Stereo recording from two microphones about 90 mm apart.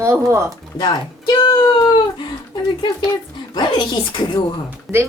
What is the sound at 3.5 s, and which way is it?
Speech, 60° left (ahead or behind).